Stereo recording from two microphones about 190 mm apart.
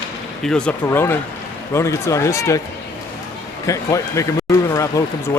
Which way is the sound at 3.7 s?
15° left (ahead or behind).